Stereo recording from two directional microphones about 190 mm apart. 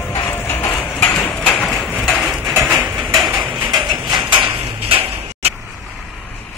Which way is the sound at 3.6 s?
25° right (ahead or behind).